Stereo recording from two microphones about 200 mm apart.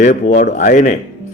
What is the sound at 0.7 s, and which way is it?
Speech, 40° left (ahead or behind).